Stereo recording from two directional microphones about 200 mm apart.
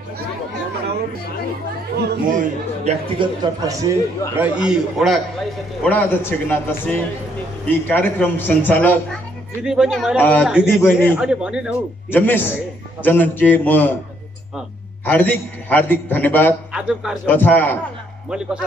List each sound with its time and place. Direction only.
2.0 s speech: 40° right (ahead or behind); by 4.0 s 15° right (ahead or behind)
4.4 s a man's voice: 5° right (ahead or behind)
9.6 s a man's voice: 5° right (ahead or behind)
12.1 s a man's voice: 10° left (ahead or behind)
15.0 s a man's voice: 10° left (ahead or behind)
16.7 s a man's voice: 5° right (ahead or behind)
17.3 s a man's voice: 10° left (ahead or behind)